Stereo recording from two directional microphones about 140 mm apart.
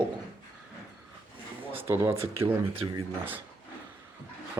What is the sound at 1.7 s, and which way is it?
Speech, 15° right (ahead or behind).